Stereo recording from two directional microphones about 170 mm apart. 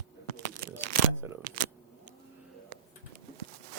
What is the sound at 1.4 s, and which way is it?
Speech, 50° right (ahead or behind).